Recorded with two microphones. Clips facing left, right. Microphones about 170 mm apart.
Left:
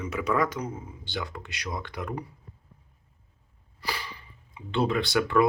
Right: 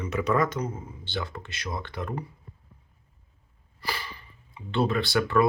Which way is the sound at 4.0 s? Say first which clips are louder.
Even; 15° left (ahead or behind).